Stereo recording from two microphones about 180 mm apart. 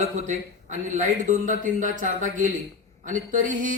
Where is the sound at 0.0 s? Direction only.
40° right (ahead or behind).